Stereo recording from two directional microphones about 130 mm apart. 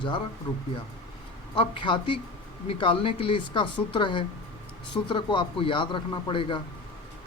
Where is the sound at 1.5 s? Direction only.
40° left (ahead or behind).